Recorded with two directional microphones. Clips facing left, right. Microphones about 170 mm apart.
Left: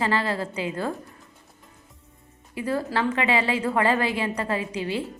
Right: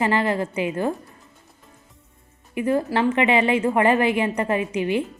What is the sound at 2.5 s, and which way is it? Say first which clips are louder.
A woman's voice: right 5 dB; 20° right (ahead or behind).